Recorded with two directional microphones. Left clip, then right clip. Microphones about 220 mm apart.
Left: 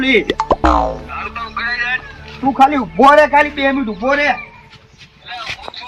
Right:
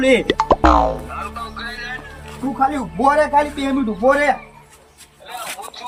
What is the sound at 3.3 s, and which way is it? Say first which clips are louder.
Speech: left 5 dB; centre (ahead or behind).